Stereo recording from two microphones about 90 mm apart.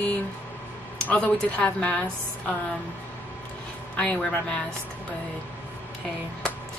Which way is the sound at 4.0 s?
10° left (ahead or behind).